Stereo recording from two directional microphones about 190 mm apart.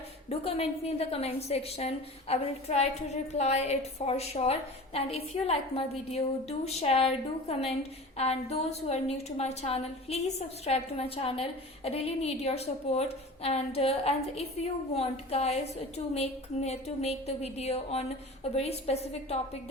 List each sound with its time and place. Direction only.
0.3 s a woman's voice: 30° left (ahead or behind)